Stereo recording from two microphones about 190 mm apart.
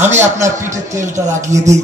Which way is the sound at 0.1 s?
35° right (ahead or behind).